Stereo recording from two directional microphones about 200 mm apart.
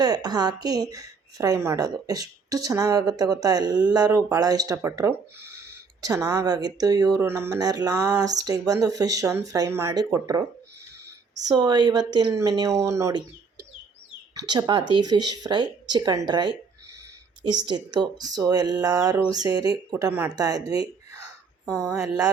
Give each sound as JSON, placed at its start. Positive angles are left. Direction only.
{"t": 0.0, "sound": "speech", "side_deg": -20}
{"t": 11.4, "sound": "speech", "side_deg": -20}
{"t": 14.3, "sound": "speech", "side_deg": -20}